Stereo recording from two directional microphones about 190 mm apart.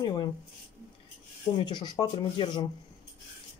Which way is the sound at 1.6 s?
20° left (ahead or behind).